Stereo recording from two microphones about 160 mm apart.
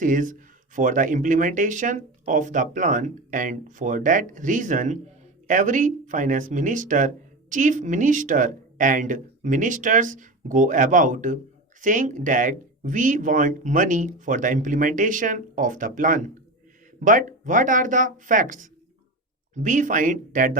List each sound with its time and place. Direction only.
0.0 s speech: 55° right (ahead or behind)